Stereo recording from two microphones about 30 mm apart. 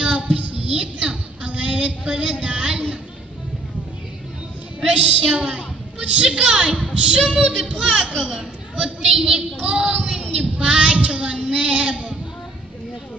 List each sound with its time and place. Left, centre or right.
0.0 s child singing: right
0.7 s music: right
1.7 s a sound: right
4.8 s a woman's voice: right
8.2 s a child's voice: right
9.0 s speech: right